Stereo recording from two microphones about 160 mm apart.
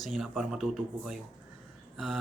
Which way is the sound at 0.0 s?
Centre (ahead or behind).